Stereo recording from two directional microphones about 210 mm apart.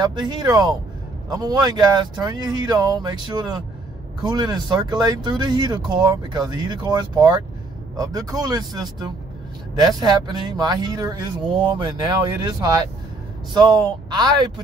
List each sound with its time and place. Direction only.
0.0 s speech: 20° right (ahead or behind)